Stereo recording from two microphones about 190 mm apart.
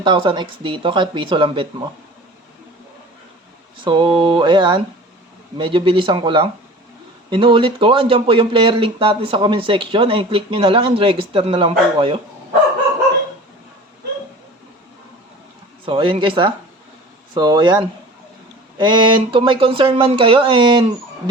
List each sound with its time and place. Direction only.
0.0 s speech: 25° right (ahead or behind)
3.8 s speech: 25° right (ahead or behind)
15.9 s speech: 25° right (ahead or behind)